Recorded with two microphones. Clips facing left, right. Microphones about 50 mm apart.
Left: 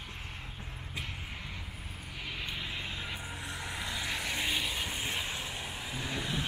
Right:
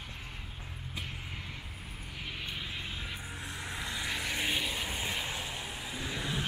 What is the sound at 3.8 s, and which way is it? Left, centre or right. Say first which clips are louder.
Vehicle: right 1 dB; centre.